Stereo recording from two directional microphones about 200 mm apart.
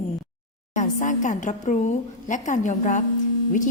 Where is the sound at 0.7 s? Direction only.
40° left (ahead or behind).